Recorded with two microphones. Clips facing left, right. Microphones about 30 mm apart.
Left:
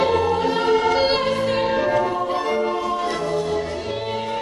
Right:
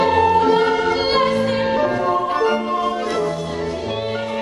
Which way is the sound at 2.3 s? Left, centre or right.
Right.